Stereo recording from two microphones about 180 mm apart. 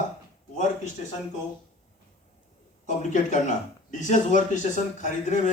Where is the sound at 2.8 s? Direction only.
45° left (ahead or behind).